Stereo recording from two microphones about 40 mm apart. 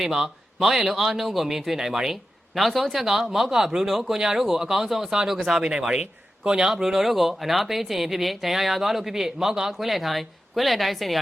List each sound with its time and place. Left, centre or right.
0.0 s a man's voice: centre
6.4 s speech: right
6.7 s speech: centre